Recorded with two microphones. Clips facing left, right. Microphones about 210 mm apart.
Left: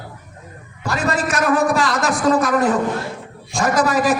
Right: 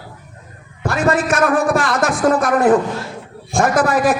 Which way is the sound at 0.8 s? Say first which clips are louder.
Right 4 dB; 55° right (ahead or behind).